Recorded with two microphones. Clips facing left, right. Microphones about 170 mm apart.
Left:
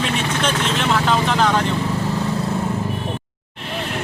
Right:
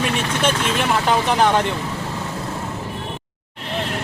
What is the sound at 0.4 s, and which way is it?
Vehicle, 10° right (ahead or behind).